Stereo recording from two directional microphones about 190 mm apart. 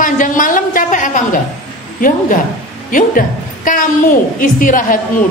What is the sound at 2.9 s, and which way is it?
A woman's voice, 45° left (ahead or behind).